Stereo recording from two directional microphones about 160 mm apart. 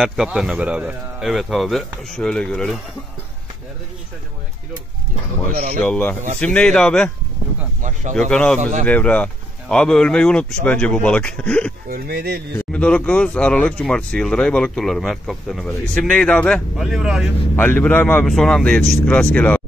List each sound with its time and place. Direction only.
0.0 s speech: 5° right (ahead or behind)
5.8 s speech: 10° left (ahead or behind)
7.8 s speech: 50° right (ahead or behind)
8.2 s speech: 5° left (ahead or behind)
11.9 s speech: 75° right (ahead or behind)
12.5 s speech: 5° left (ahead or behind)
17.6 s speech: 10° left (ahead or behind)